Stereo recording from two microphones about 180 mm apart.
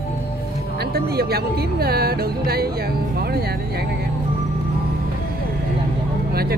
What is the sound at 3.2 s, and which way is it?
Music, 60° right (ahead or behind).